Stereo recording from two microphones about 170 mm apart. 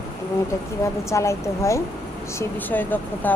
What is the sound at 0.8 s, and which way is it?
Speech, 15° left (ahead or behind).